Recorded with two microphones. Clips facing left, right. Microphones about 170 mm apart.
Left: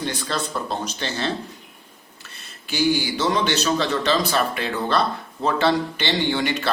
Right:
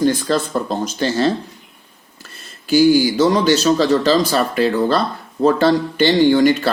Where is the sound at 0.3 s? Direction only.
40° right (ahead or behind).